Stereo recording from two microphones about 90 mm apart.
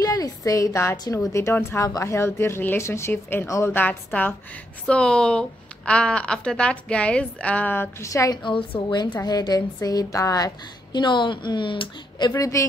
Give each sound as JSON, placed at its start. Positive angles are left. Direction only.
{"t": 0.0, "sound": "a sound", "side_deg": 40}
{"t": 1.3, "sound": "a woman's voice", "side_deg": 30}
{"t": 8.1, "sound": "a woman's voice", "side_deg": 35}
{"t": 8.5, "sound": "speech", "side_deg": 60}
{"t": 9.2, "sound": "a woman's voice", "side_deg": 45}
{"t": 10.9, "sound": "speech", "side_deg": 60}
{"t": 12.3, "sound": "a woman's voice", "side_deg": 40}